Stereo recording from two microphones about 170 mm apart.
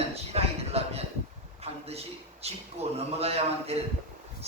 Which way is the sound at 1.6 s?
35° right (ahead or behind).